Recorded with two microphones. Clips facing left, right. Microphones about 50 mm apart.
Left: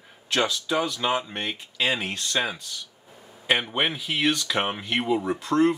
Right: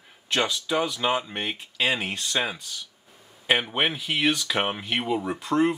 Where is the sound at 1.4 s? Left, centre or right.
Centre.